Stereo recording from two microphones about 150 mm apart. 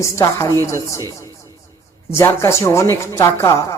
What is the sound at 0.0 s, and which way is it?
A woman's voice, 20° left (ahead or behind).